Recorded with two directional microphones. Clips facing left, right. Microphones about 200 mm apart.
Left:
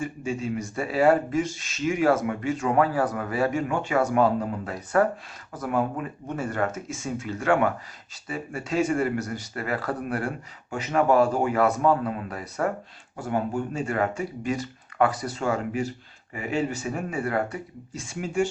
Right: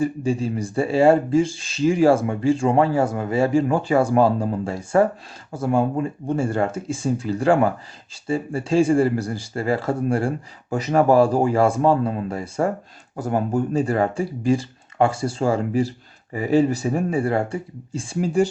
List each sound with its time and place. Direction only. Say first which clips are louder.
0.0 s speech: right 7 dB; 35° right (ahead or behind)
13.1 s speech: right 5 dB; 40° right (ahead or behind)